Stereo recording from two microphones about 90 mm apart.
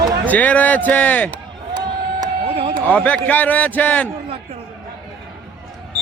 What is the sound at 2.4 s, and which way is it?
Run, 90° right.